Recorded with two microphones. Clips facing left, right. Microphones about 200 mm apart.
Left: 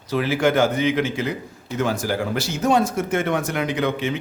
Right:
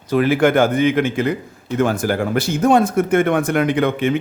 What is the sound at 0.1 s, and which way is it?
Speech, 55° right (ahead or behind).